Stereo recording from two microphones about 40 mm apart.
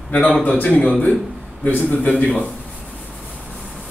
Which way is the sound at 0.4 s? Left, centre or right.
Left.